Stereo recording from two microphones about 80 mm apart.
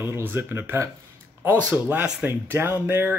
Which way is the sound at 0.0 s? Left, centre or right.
Right.